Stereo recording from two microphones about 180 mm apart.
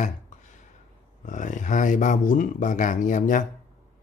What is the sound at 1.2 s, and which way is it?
Speech, 45° left (ahead or behind).